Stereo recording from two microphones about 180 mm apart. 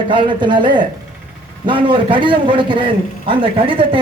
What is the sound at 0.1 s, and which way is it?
A man's voice, 25° right (ahead or behind).